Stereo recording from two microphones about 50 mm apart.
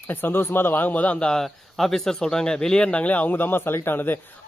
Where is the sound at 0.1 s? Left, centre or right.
Left.